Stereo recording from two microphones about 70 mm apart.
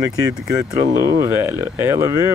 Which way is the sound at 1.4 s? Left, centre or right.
Right.